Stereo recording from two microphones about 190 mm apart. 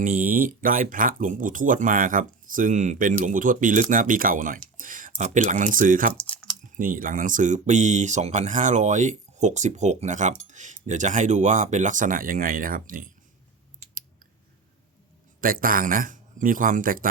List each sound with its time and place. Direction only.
0.0 s speech: 45° right (ahead or behind)
6.1 s chewing: 5° left (ahead or behind)
6.7 s speech: 45° right (ahead or behind)
15.4 s speech: 50° right (ahead or behind)